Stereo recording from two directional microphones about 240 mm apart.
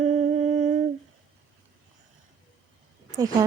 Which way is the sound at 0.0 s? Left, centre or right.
Right.